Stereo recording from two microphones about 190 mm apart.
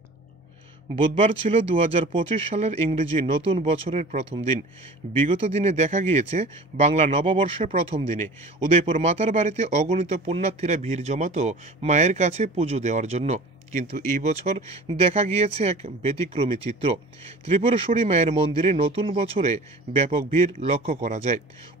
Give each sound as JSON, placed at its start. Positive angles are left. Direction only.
{"t": 1.1, "sound": "speech", "side_deg": -30}